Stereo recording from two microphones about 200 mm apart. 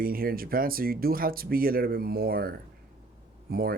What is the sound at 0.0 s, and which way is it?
Speech, 45° right (ahead or behind).